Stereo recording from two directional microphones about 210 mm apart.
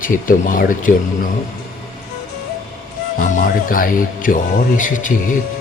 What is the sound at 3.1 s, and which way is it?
Speech, 40° left (ahead or behind).